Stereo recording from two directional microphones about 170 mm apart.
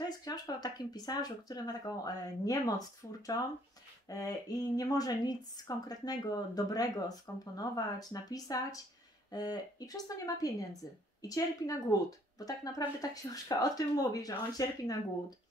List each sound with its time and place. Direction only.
0.2 s speech: 25° left (ahead or behind)